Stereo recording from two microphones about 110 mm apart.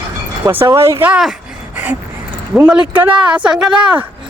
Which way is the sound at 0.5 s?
25° right (ahead or behind).